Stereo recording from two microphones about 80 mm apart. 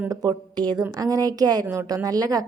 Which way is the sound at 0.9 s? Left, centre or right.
Right.